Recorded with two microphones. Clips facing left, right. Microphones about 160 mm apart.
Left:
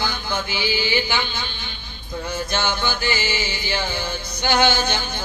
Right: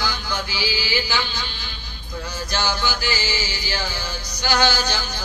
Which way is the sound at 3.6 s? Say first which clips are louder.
Left 3 dB; 55° left (ahead or behind).